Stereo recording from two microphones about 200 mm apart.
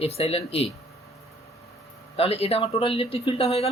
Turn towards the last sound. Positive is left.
turn(degrees=30)  # may be behind; listen again after turning